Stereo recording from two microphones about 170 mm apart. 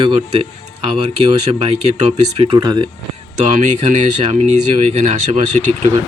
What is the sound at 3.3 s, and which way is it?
Speech, 40° right (ahead or behind).